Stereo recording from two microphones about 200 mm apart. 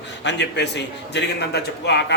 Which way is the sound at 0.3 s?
60° left (ahead or behind).